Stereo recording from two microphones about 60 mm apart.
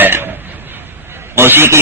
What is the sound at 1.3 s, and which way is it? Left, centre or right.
Speech, right.